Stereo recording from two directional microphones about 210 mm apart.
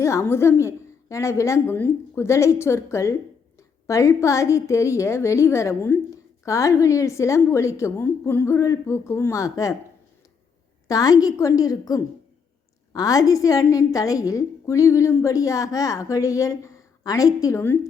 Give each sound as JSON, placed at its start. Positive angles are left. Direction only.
{"t": 0.0, "sound": "a woman's voice", "side_deg": 15}
{"t": 10.8, "sound": "a woman's voice", "side_deg": 15}